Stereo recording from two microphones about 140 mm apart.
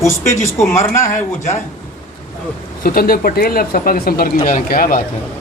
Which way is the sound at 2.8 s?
90° left.